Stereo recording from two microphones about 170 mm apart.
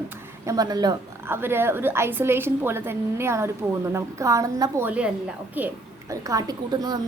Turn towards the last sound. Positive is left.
turn(degrees=-20)  # may be behind; listen again after turning